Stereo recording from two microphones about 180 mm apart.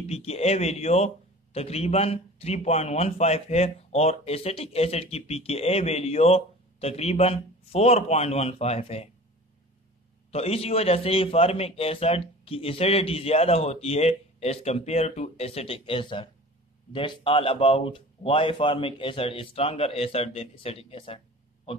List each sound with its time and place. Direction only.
0.0 s a man's voice: 35° left (ahead or behind)
10.3 s a man's voice: 35° left (ahead or behind)